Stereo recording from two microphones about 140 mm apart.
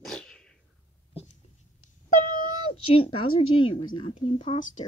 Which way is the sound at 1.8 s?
70° left (ahead or behind).